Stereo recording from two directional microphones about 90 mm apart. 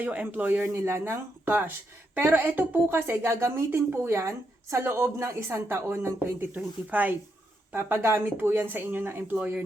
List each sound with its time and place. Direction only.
0.0 s a woman's voice: 20° right (ahead or behind)